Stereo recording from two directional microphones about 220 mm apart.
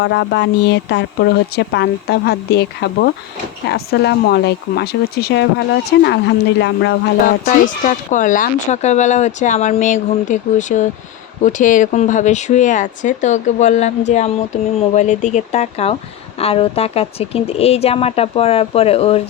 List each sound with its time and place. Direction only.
0.0 s speech: 50° left (ahead or behind); by 19.2 s 25° left (ahead or behind)